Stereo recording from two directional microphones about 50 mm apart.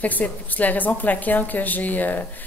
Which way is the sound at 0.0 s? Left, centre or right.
Left.